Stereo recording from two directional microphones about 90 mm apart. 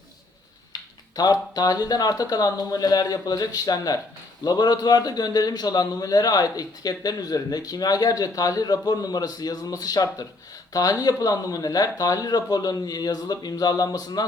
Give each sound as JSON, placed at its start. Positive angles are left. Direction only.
{"t": 0.7, "sound": "a man's voice", "side_deg": 45}